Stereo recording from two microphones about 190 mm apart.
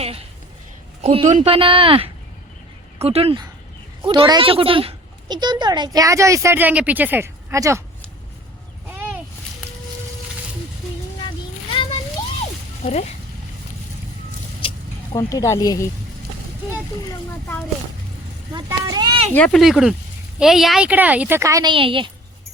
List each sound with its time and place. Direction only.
1.0 s speech: 35° right (ahead or behind); by 7.8 s 15° right (ahead or behind)
8.9 s a sound: 10° right (ahead or behind)
11.7 s children playing: 30° left (ahead or behind)
15.1 s speech: 20° left (ahead or behind)
18.5 s speech: 20° right (ahead or behind)
19.3 s speech: 5° left (ahead or behind); by 22.1 s 25° right (ahead or behind)